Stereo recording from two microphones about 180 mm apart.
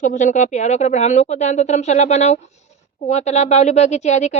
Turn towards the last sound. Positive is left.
turn(degrees=40)  # may be behind; listen again after turning